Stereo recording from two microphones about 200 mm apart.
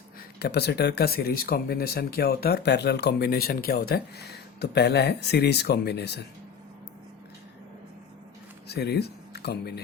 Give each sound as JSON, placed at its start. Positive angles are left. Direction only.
{"t": 0.3, "sound": "speech", "side_deg": 55}
{"t": 8.6, "sound": "speech", "side_deg": 55}